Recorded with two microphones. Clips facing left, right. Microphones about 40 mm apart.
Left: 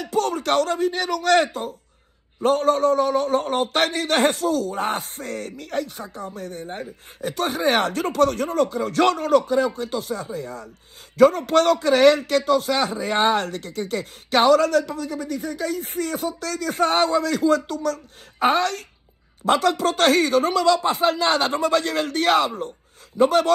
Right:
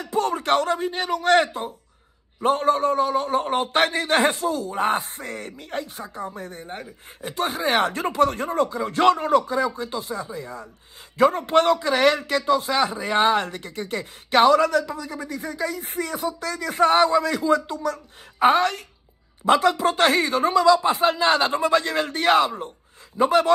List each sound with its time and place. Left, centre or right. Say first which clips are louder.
0.3 s speech: even; right